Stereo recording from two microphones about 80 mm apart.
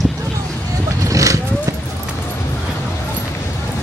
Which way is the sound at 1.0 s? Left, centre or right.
Right.